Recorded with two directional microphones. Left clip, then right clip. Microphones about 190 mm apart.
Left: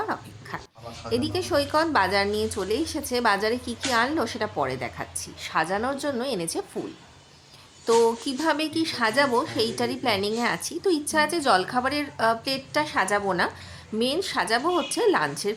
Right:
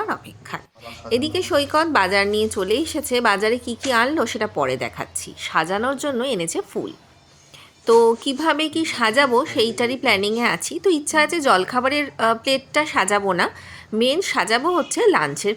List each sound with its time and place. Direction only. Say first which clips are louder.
0.0 s a woman's voice: right 4 dB; 15° right (ahead or behind)
7.9 s a woman's voice: right 6 dB; 15° right (ahead or behind)